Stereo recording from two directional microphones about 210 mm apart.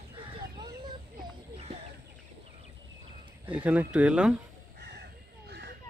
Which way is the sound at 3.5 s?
5° right (ahead or behind).